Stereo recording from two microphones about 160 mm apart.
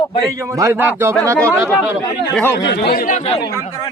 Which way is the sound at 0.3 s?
20° right (ahead or behind).